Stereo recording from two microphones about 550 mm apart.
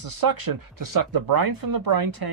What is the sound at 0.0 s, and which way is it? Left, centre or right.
Speech, right.